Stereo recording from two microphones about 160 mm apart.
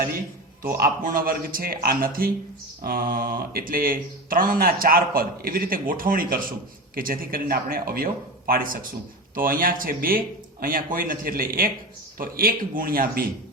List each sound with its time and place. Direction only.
0.8 s a man's voice: 65° right (ahead or behind)